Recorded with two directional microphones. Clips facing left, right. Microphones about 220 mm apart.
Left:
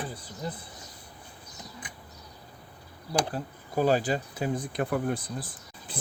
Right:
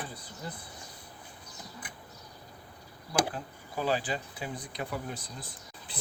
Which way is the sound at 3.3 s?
45° left (ahead or behind).